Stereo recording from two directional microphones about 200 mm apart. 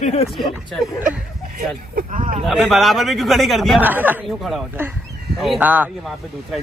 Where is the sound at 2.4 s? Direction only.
Centre (ahead or behind).